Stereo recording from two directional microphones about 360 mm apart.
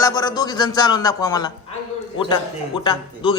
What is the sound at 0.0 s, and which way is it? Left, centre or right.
A man's voice, centre.